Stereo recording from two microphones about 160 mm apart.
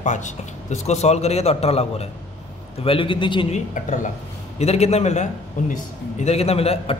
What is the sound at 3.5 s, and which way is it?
A man's voice, 50° left (ahead or behind).